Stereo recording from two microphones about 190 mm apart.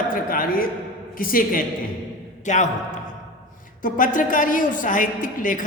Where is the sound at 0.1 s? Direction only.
50° left (ahead or behind).